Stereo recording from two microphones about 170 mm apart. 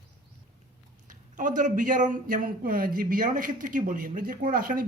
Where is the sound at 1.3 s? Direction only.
50° right (ahead or behind).